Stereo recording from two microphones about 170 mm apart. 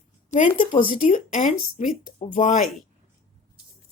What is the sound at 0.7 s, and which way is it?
Speech, 30° left (ahead or behind).